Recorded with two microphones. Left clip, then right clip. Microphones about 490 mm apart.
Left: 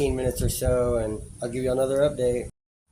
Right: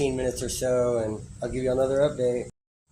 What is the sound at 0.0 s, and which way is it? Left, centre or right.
Speech, left.